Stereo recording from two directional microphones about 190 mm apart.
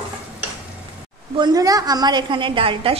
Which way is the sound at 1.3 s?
20° right (ahead or behind).